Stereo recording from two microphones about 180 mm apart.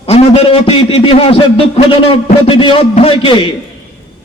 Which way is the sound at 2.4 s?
30° left (ahead or behind).